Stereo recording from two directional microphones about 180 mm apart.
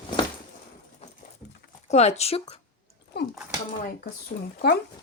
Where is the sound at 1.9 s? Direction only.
35° left (ahead or behind).